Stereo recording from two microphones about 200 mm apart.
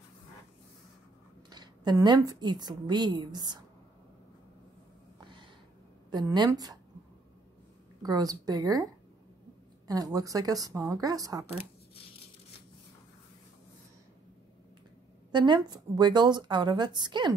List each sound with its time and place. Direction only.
1.5 s a woman's voice: 20° right (ahead or behind)
6.0 s a woman's voice: 20° right (ahead or behind)
8.0 s a woman's voice: 20° right (ahead or behind)
9.8 s a woman's voice: 20° right (ahead or behind)
15.3 s a woman's voice: 20° right (ahead or behind)